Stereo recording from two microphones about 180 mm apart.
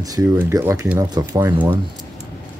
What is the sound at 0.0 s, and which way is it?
Speech, 15° right (ahead or behind).